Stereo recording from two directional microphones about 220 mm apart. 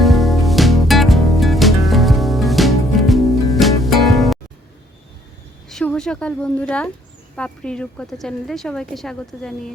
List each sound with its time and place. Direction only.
0.0 s music: centre (ahead or behind)
5.6 s a woman's voice: 5° left (ahead or behind)